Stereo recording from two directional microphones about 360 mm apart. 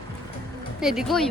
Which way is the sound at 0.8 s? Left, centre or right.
Centre.